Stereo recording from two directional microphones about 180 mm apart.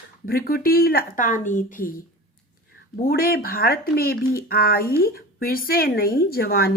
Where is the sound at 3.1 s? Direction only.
55° left (ahead or behind).